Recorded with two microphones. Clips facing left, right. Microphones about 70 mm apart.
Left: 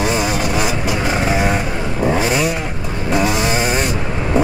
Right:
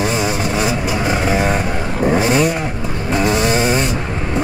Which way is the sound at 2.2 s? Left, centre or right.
Right.